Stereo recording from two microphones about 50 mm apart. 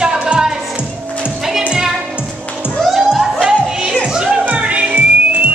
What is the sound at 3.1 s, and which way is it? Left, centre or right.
Music, centre.